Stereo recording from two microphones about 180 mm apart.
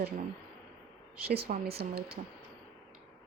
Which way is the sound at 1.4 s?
40° right (ahead or behind).